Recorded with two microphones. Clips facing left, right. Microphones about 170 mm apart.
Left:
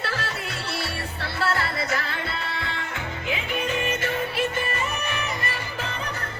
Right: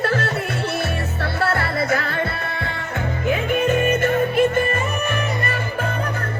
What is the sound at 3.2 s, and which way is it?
Music, 50° right (ahead or behind).